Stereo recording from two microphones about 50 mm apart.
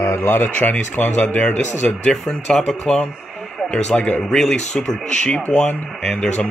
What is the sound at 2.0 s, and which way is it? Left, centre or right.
Speech, centre.